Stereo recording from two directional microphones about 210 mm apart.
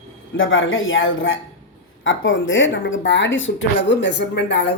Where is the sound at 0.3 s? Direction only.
65° left (ahead or behind).